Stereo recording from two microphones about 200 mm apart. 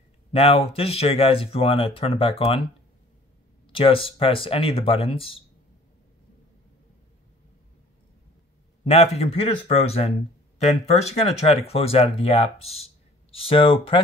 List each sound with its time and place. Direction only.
0.3 s speech: 30° left (ahead or behind)
3.6 s speech: 25° left (ahead or behind)
8.8 s speech: 30° left (ahead or behind)